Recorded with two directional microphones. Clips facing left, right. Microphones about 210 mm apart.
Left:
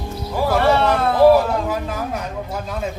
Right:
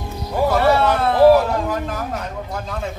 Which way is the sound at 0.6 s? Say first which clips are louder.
Left 1 dB; 5° right (ahead or behind).